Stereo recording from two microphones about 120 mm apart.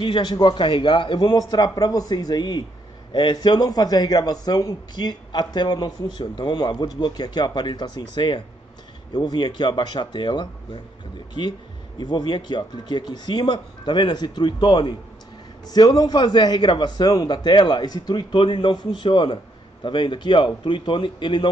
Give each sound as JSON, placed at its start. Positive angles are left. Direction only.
{"t": 0.0, "sound": "a man's voice", "side_deg": 40}
{"t": 12.0, "sound": "a man's voice", "side_deg": 35}